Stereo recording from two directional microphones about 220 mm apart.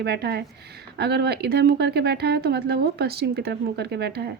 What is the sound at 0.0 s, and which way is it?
A woman's voice, 50° right (ahead or behind).